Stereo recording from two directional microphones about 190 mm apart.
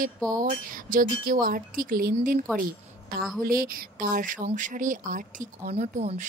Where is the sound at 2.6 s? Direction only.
50° right (ahead or behind).